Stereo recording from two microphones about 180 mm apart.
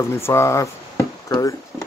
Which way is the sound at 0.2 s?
15° left (ahead or behind).